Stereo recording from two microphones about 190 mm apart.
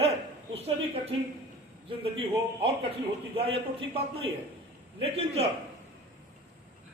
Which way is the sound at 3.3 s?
30° right (ahead or behind).